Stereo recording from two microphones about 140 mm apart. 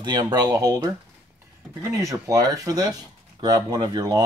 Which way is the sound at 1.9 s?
20° right (ahead or behind).